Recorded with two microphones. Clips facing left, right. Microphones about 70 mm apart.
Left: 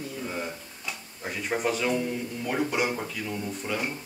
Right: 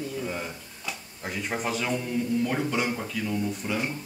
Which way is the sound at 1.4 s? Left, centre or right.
Centre.